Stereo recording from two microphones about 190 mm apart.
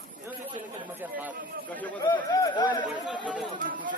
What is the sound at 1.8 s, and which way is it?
Speech, 10° left (ahead or behind).